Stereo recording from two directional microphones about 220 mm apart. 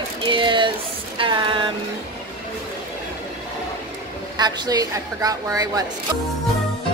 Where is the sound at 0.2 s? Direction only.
20° right (ahead or behind).